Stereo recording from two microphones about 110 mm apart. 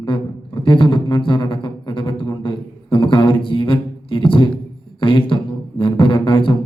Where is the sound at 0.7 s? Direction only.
50° left (ahead or behind).